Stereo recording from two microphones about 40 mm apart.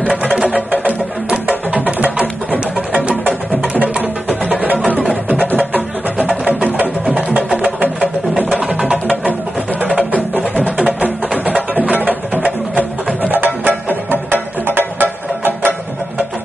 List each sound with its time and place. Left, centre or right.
0.3 s music: right
0.6 s music: right
3.7 s music: right
6.8 s music: right
7.8 s a sound: right
8.5 s music: right
10.8 s music: right